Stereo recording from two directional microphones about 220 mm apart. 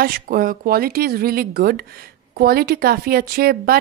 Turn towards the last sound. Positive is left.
turn(degrees=-40)  # may be behind; listen again after turning